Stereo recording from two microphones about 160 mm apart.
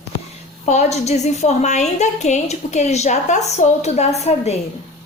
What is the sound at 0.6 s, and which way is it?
A woman's voice, 45° left (ahead or behind).